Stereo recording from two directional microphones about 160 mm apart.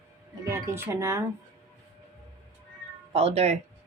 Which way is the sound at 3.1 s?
40° right (ahead or behind).